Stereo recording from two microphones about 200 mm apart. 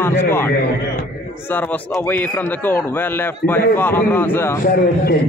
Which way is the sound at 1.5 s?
10° left (ahead or behind).